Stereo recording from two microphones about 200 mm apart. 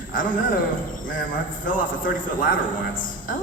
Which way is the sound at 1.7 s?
40° left (ahead or behind).